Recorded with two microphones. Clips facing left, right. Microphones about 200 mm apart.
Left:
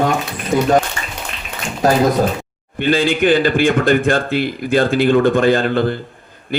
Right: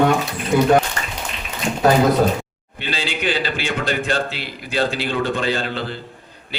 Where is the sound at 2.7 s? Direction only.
50° left (ahead or behind).